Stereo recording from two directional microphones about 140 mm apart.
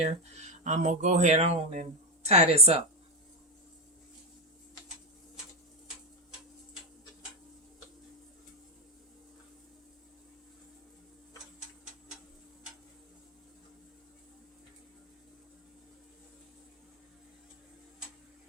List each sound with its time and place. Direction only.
0.0 s speech: 55° right (ahead or behind)